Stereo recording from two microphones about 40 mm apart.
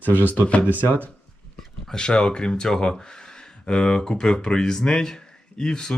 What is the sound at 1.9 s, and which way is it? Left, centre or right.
Speech, left.